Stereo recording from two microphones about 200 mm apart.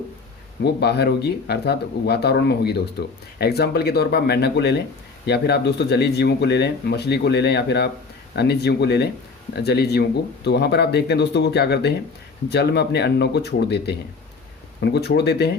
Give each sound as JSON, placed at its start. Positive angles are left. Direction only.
{"t": 0.6, "sound": "speech", "side_deg": 55}